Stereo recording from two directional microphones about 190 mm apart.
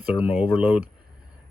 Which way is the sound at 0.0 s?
5° right (ahead or behind).